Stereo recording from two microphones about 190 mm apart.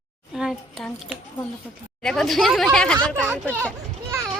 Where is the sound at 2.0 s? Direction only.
5° left (ahead or behind).